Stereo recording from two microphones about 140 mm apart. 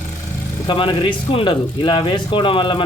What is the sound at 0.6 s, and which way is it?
Speech, 35° left (ahead or behind).